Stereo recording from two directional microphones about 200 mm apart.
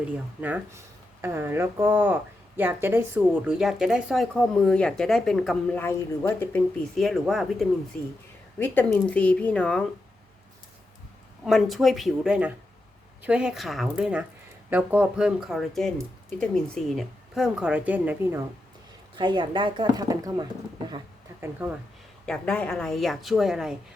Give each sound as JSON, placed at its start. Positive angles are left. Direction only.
{"t": 1.2, "sound": "a woman's voice", "side_deg": -10}
{"t": 7.0, "sound": "a woman's voice", "side_deg": 0}
{"t": 11.4, "sound": "a woman's voice", "side_deg": 0}
{"t": 19.1, "sound": "speech", "side_deg": -25}
{"t": 21.6, "sound": "speech", "side_deg": -10}
{"t": 22.3, "sound": "a woman's voice", "side_deg": 5}